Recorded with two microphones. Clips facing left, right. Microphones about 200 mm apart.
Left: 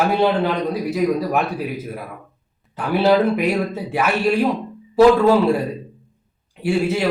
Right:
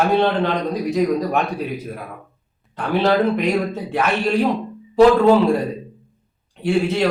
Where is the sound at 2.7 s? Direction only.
5° left (ahead or behind).